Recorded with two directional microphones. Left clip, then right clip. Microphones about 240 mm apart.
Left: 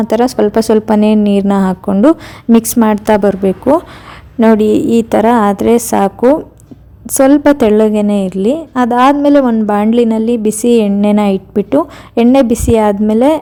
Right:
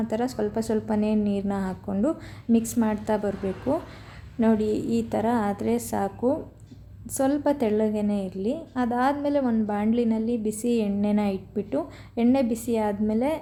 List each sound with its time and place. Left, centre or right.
0.0 s a woman's voice: left